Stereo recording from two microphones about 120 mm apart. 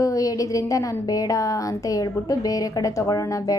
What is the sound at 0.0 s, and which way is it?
A woman's voice, 30° left (ahead or behind).